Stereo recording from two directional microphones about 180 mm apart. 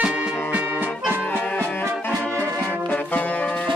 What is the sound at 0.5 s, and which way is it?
Music, 10° right (ahead or behind).